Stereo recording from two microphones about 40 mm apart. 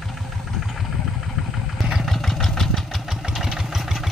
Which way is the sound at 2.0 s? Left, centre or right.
Centre.